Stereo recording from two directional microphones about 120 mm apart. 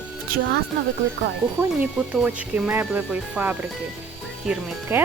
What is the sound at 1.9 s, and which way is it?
Speech, 10° right (ahead or behind).